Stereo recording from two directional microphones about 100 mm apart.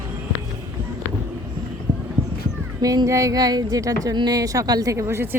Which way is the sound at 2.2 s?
90° right.